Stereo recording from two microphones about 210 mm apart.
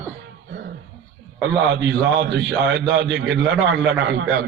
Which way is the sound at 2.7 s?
55° right (ahead or behind).